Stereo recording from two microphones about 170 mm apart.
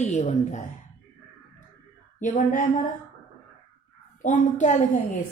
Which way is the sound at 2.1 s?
50° left (ahead or behind).